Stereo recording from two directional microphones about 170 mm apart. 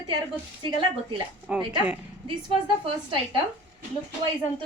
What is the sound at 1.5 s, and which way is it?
Speech, 10° right (ahead or behind).